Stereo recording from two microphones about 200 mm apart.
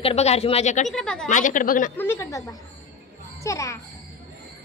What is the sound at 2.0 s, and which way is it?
A woman's voice, 10° left (ahead or behind).